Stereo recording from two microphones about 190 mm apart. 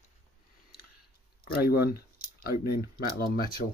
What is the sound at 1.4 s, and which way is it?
Speech, 55° left (ahead or behind).